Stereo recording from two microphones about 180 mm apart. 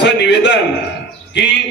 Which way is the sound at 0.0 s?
75° left (ahead or behind).